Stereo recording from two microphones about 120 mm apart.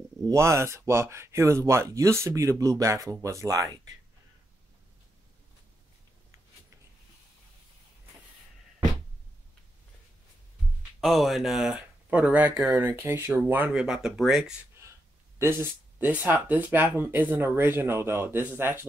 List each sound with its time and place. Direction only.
0.3 s speech: 25° right (ahead or behind)
11.0 s speech: centre (ahead or behind)
15.3 s speech: 20° right (ahead or behind)